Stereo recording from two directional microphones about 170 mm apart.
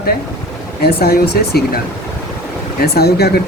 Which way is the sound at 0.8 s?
65° left (ahead or behind).